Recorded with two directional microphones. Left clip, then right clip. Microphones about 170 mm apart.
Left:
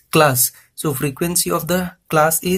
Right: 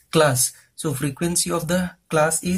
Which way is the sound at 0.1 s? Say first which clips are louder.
Left 4 dB; 35° left (ahead or behind).